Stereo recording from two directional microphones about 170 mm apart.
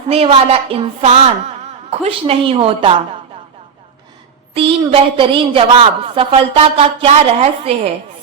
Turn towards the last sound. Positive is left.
turn(degrees=-40)  # may be behind; listen again after turning